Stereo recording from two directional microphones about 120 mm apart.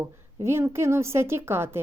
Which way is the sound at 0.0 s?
25° right (ahead or behind).